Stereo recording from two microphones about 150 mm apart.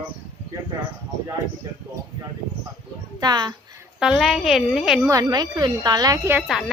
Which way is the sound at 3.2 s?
30° right (ahead or behind).